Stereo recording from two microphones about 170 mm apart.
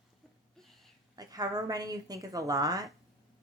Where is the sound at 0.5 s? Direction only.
Centre (ahead or behind).